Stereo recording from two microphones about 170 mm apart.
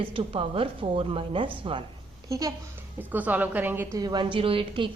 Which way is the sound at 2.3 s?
20° right (ahead or behind).